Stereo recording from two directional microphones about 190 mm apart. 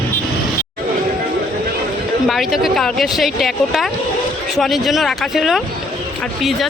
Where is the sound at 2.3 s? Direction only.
Centre (ahead or behind).